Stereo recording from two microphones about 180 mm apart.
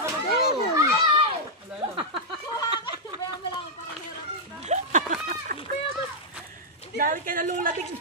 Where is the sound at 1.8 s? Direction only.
30° right (ahead or behind).